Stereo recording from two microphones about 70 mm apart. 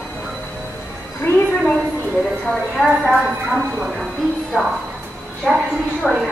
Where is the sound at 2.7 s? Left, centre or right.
Centre.